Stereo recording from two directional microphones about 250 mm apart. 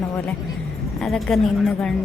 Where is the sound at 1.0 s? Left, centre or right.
Centre.